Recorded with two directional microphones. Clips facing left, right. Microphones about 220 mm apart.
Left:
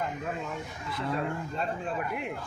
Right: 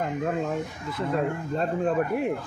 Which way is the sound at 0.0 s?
45° right (ahead or behind).